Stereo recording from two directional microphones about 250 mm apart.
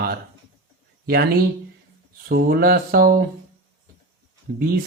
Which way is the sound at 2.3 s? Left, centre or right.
Right.